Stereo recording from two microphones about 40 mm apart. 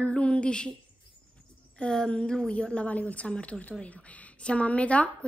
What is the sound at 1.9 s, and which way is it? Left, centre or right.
Speech, left.